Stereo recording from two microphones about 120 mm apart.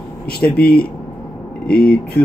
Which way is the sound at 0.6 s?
10° left (ahead or behind).